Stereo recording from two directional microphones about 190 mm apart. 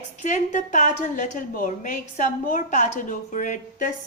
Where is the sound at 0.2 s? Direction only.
40° left (ahead or behind).